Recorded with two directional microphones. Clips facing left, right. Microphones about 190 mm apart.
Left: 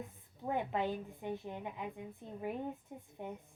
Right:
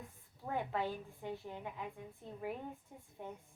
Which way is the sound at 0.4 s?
20° left (ahead or behind).